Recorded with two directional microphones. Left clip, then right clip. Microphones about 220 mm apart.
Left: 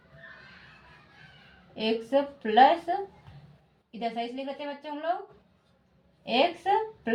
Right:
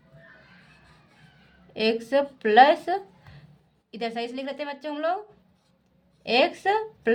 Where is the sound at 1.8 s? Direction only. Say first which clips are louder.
Right 3 dB; 45° right (ahead or behind).